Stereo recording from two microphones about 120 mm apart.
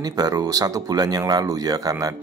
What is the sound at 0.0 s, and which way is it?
Speech, 30° right (ahead or behind).